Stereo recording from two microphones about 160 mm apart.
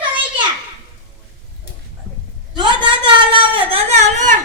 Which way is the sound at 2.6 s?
30° right (ahead or behind).